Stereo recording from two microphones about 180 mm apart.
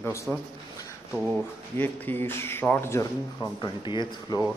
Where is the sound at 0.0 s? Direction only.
15° left (ahead or behind).